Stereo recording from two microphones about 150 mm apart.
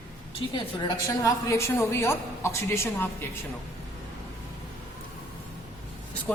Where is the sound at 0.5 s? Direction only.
25° left (ahead or behind).